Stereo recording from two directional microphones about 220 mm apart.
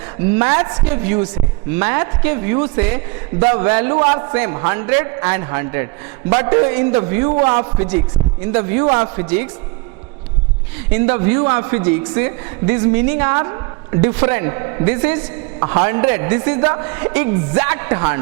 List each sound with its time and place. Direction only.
0.3 s a man's voice: 20° right (ahead or behind)
10.9 s a man's voice: 15° right (ahead or behind)